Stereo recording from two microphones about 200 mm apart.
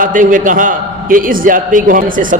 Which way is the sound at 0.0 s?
40° right (ahead or behind).